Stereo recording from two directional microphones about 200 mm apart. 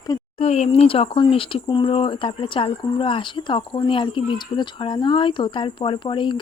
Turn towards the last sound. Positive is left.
turn(degrees=25)  # may be behind; listen again after turning